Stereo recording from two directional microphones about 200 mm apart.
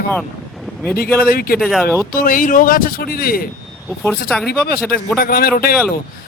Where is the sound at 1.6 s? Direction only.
Centre (ahead or behind).